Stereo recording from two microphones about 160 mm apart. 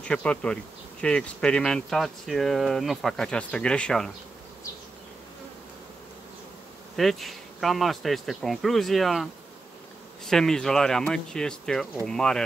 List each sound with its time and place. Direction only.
0.0 s bee: 5° left (ahead or behind)
1.0 s speech: 5° left (ahead or behind)
7.0 s speech: centre (ahead or behind)